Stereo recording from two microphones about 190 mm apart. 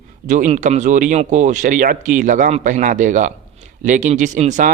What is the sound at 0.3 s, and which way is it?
Speech, 40° right (ahead or behind).